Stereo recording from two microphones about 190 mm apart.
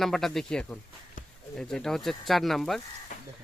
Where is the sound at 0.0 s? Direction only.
Centre (ahead or behind).